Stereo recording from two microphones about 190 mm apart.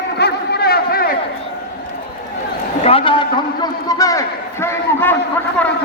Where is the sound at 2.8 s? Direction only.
30° left (ahead or behind).